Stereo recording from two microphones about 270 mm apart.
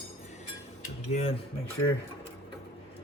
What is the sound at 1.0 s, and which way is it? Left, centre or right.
Speech, left.